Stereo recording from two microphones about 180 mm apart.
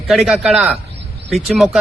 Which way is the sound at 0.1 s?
Centre (ahead or behind).